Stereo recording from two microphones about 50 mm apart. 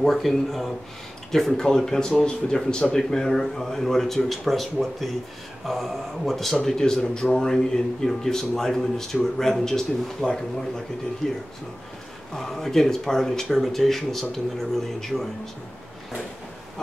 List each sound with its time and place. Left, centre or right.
0.0 s speech: centre